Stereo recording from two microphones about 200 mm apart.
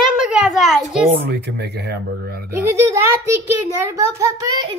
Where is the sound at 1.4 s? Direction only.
55° right (ahead or behind).